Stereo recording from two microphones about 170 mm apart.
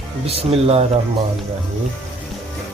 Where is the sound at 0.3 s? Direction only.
35° right (ahead or behind).